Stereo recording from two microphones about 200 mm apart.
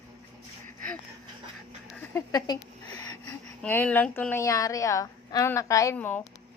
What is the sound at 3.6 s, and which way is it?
A woman's voice, 10° left (ahead or behind).